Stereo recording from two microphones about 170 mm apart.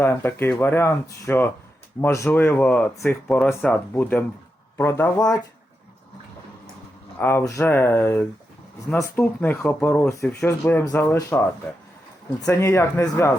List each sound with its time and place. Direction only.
0.0 s speech: 15° left (ahead or behind)
7.2 s speech: 15° left (ahead or behind)
12.5 s speech: 15° left (ahead or behind)